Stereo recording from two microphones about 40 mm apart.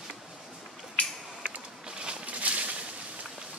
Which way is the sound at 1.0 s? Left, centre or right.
Left.